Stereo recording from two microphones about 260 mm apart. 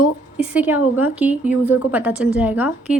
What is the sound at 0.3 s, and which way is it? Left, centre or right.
A woman's voice, centre.